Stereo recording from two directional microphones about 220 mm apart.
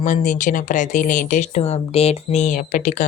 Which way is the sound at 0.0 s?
35° left (ahead or behind).